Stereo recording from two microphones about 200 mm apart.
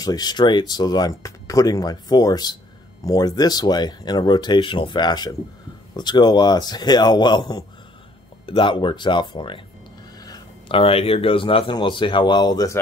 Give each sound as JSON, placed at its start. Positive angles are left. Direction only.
{"t": 0.0, "sound": "speech", "side_deg": 20}